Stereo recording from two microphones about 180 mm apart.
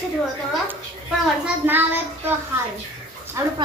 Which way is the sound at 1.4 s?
10° right (ahead or behind).